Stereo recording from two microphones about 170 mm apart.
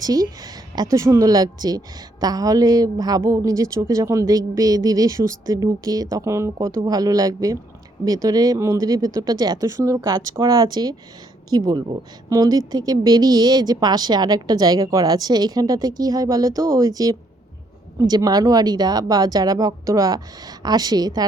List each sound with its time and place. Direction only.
0.0 s speech: 20° right (ahead or behind)